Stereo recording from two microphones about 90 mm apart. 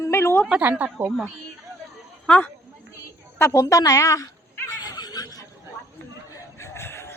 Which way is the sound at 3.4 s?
30° left (ahead or behind).